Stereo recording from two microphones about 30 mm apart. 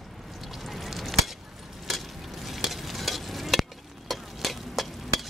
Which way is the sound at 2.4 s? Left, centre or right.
Centre.